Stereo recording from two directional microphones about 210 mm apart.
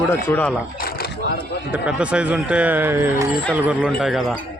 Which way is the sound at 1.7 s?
5° right (ahead or behind).